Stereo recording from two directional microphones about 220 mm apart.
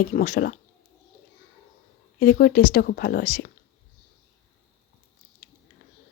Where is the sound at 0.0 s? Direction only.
40° left (ahead or behind).